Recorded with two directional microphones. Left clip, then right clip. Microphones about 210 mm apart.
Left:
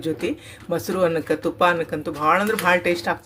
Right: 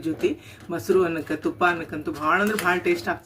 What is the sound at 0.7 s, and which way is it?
Speech, 30° left (ahead or behind).